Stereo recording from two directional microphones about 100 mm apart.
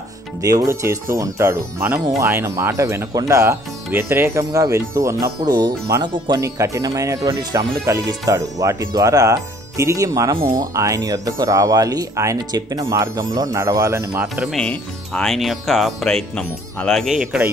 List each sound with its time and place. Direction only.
0.4 s speech: 35° right (ahead or behind)
5.2 s speech: 40° right (ahead or behind)
6.0 s speech: 50° right (ahead or behind)
6.4 s speech: 30° right (ahead or behind)
14.3 s speech: centre (ahead or behind)
14.6 s speech: 10° left (ahead or behind)
17.0 s speech: 5° right (ahead or behind)